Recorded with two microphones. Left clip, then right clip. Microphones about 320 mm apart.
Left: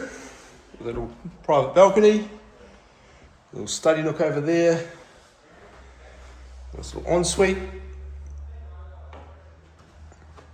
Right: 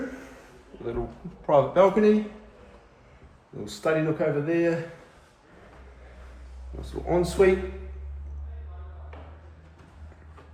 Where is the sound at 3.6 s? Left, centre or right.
Centre.